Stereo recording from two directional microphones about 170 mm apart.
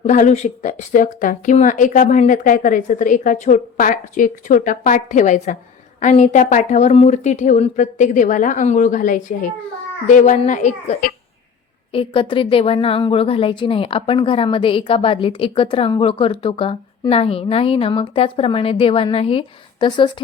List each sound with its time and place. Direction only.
0.0 s a woman's voice: 45° left (ahead or behind)
11.9 s a woman's voice: 30° left (ahead or behind)